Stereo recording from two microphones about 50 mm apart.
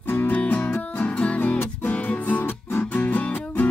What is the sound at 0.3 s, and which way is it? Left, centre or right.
Music, left.